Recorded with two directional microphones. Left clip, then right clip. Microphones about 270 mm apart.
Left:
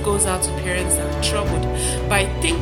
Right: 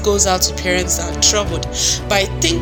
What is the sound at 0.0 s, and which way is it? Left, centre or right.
A woman's voice, centre.